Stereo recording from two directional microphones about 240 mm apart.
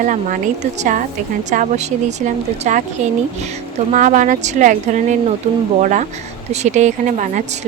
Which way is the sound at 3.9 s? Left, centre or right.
Right.